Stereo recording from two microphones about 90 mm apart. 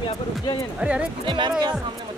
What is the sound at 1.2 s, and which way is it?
Speech, 65° right (ahead or behind).